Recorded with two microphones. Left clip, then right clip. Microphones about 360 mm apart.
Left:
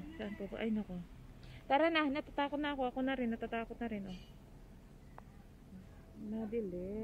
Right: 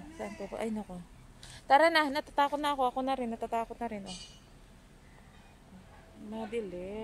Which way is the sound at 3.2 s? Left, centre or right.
Right.